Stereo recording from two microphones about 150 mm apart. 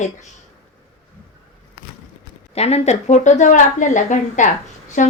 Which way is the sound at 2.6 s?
45° left (ahead or behind).